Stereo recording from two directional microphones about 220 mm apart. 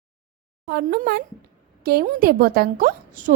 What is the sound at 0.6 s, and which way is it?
A woman's voice, 45° right (ahead or behind).